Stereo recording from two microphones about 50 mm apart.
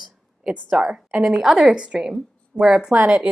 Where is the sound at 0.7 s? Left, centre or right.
Centre.